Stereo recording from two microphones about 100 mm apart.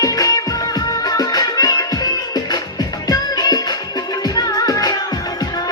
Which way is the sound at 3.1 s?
40° left (ahead or behind).